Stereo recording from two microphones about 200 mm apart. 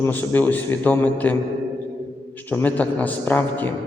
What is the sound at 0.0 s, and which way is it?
A man's voice, 10° left (ahead or behind).